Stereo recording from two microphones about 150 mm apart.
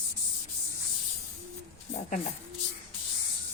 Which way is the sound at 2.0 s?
55° left (ahead or behind).